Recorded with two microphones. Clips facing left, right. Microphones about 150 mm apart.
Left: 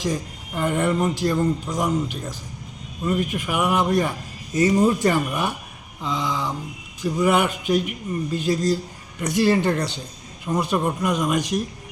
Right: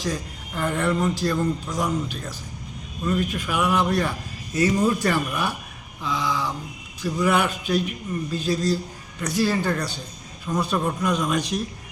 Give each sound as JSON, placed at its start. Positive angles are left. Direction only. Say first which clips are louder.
{"t": 0.0, "sound": "speech", "louder": "left 3 dB", "side_deg": 20}